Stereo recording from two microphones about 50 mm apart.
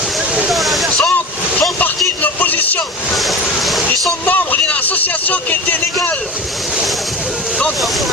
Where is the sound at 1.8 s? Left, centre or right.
Left.